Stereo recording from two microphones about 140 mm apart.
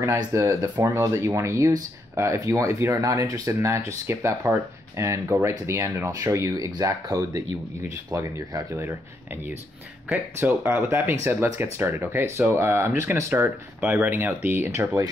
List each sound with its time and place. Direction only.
0.0 s speech: 20° right (ahead or behind)